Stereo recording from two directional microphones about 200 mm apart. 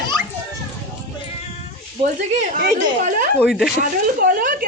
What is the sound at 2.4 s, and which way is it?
Speech, 45° right (ahead or behind).